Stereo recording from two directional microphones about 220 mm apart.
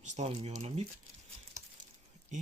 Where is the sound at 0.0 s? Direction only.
30° right (ahead or behind).